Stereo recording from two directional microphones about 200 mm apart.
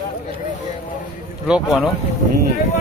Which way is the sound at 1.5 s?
5° right (ahead or behind).